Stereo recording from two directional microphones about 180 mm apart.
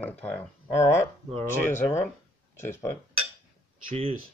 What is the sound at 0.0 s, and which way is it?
Speech, 10° left (ahead or behind).